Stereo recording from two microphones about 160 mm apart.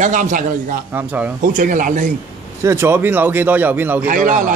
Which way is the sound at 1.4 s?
55° right (ahead or behind).